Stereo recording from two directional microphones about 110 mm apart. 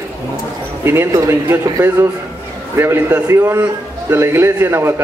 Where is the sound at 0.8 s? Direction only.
25° right (ahead or behind).